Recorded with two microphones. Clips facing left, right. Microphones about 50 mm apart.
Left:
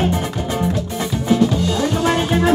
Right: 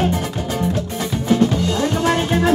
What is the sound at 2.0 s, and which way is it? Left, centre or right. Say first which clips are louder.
Music: left 1 dB; left.